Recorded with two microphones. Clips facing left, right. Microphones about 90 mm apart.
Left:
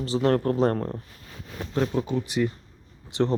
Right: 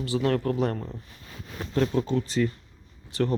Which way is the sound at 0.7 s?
55° left (ahead or behind).